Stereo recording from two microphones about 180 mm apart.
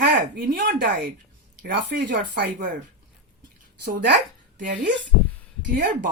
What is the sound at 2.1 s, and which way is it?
Speech, 70° right (ahead or behind).